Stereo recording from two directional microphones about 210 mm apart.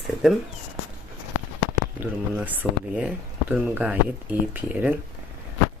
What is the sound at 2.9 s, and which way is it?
Speech, 5° right (ahead or behind).